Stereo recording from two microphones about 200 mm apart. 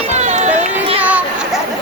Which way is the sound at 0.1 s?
35° right (ahead or behind).